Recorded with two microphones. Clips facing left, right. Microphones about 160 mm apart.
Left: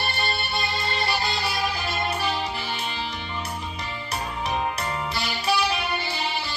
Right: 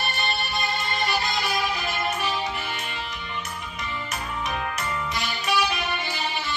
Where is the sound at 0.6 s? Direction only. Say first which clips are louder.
Even; 30° left (ahead or behind).